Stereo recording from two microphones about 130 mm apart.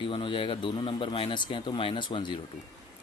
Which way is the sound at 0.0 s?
40° left (ahead or behind).